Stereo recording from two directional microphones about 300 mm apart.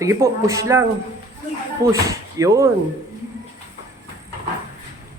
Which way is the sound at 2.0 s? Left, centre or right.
Centre.